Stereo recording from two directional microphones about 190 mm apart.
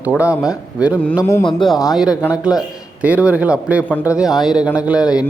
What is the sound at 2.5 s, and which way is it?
A man's voice, 5° right (ahead or behind).